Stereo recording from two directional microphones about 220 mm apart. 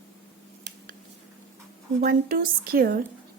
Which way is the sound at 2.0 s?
40° right (ahead or behind).